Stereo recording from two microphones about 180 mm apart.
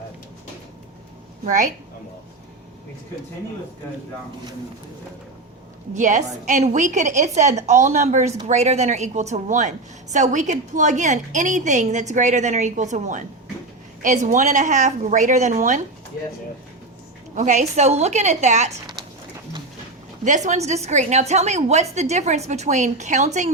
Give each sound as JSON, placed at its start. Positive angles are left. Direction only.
{"t": 1.5, "sound": "a woman's voice", "side_deg": -45}
{"t": 5.9, "sound": "a woman's voice", "side_deg": -40}
{"t": 17.3, "sound": "a woman's voice", "side_deg": -40}
{"t": 20.2, "sound": "a woman's voice", "side_deg": -40}